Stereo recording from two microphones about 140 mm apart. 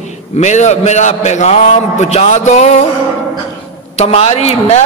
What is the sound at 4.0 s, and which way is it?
Speech, 50° left (ahead or behind).